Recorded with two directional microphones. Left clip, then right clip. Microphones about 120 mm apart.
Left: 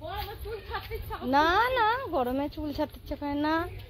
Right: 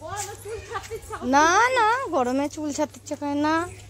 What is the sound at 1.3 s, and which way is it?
Speech, 35° right (ahead or behind).